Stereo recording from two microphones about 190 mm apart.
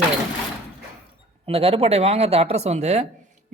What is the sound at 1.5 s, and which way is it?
A woman's voice, 30° right (ahead or behind).